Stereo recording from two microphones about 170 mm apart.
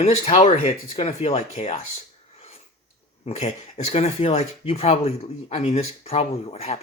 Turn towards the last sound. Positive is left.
turn(degrees=40)  # may be behind; listen again after turning